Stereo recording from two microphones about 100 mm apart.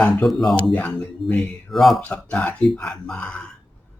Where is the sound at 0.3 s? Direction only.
Centre (ahead or behind).